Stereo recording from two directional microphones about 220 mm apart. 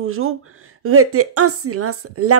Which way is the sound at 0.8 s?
80° right.